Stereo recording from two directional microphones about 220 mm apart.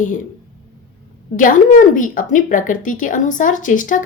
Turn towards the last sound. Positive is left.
turn(degrees=35)  # may be behind; listen again after turning